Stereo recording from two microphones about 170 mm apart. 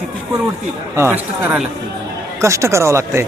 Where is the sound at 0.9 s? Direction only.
10° right (ahead or behind).